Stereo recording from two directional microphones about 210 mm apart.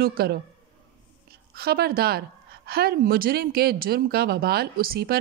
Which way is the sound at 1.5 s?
45° right (ahead or behind).